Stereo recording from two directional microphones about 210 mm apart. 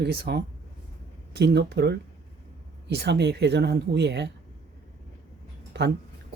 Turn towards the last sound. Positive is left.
turn(degrees=-55)  # may be behind; listen again after turning